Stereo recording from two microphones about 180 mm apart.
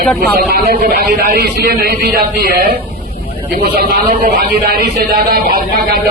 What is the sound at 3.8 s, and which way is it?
A man's voice, 55° right (ahead or behind).